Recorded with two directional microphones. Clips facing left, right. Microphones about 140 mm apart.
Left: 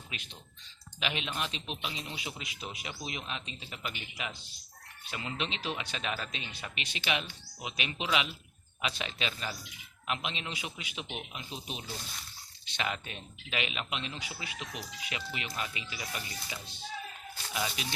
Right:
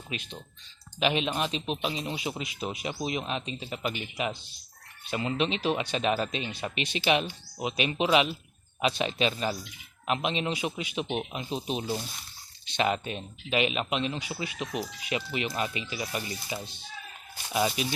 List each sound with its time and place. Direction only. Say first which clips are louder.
0.1 s speech: right 11 dB; 30° right (ahead or behind)
11.1 s speech: right 11 dB; 45° right (ahead or behind)
11.3 s speech: right 10 dB; 25° right (ahead or behind)